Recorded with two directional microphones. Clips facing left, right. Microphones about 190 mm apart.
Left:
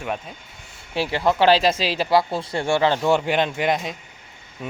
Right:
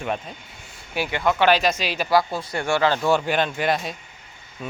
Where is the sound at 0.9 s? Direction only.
30° left (ahead or behind).